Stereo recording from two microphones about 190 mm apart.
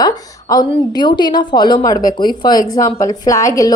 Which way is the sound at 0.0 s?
20° left (ahead or behind).